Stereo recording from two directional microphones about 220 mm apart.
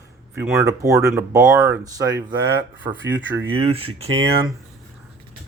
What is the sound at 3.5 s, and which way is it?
Speech, 25° right (ahead or behind).